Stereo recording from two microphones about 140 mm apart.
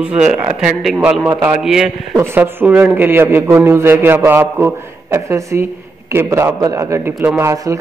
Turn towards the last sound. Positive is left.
turn(degrees=-25)  # may be behind; listen again after turning